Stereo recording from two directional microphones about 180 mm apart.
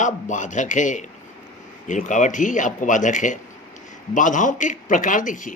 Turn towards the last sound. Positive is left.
turn(degrees=45)  # may be behind; listen again after turning